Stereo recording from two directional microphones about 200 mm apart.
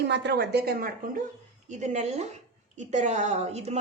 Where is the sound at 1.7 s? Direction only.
35° right (ahead or behind).